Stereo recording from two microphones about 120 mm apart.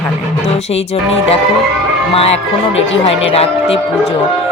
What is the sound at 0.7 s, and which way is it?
Speech, 60° left (ahead or behind).